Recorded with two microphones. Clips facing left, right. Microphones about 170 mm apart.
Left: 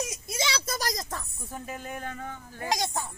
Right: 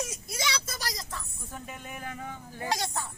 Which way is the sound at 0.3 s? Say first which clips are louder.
Left 4 dB; 30° left (ahead or behind).